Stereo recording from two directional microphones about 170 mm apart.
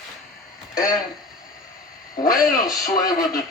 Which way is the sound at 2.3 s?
20° left (ahead or behind).